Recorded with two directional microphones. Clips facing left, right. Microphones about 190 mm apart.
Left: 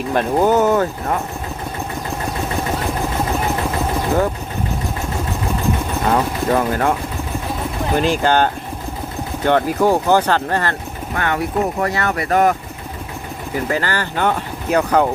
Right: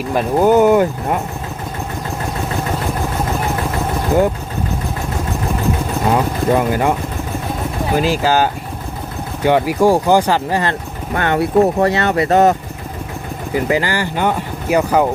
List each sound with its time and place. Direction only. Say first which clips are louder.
0.1 s speech: right 3 dB; 5° right (ahead or behind)
6.1 s speech: right 2 dB; 10° right (ahead or behind)
7.9 s speech: right 1 dB; 5° right (ahead or behind)
11.1 s speech: right 6 dB; 30° right (ahead or behind)
13.7 s speech: right 3 dB; 15° right (ahead or behind)